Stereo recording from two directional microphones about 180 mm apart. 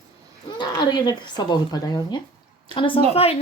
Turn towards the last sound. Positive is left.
turn(degrees=35)  # may be behind; listen again after turning